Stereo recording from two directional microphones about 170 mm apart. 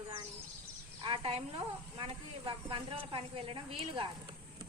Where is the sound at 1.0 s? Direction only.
35° right (ahead or behind).